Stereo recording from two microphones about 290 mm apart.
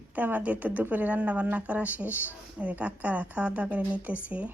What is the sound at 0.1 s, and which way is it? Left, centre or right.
Speech, centre.